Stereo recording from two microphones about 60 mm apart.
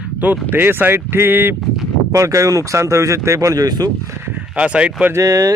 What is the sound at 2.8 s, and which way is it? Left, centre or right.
Speech, right.